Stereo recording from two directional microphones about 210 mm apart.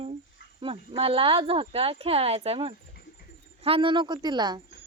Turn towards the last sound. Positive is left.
turn(degrees=-20)  # may be behind; listen again after turning